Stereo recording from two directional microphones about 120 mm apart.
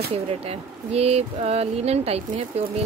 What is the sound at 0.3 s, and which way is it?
Speech, 60° right (ahead or behind).